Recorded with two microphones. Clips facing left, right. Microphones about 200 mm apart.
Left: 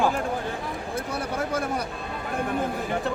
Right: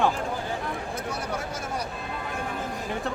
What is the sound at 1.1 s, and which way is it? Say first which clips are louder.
Speech: left 6 dB; 55° left (ahead or behind).